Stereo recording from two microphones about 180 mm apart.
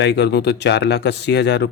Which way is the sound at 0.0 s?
70° left (ahead or behind).